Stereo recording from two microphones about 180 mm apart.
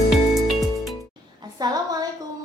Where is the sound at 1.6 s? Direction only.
20° right (ahead or behind).